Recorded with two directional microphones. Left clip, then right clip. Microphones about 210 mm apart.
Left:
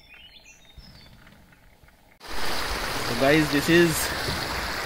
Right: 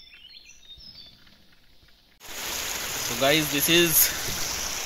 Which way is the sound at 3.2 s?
20° right (ahead or behind).